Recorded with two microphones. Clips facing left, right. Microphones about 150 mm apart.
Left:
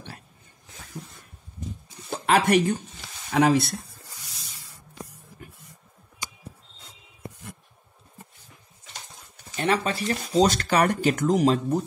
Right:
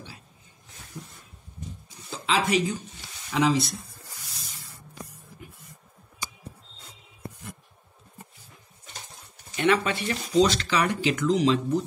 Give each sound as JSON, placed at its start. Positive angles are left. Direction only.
{"t": 2.0, "sound": "speech", "side_deg": 60}
{"t": 9.6, "sound": "speech", "side_deg": 35}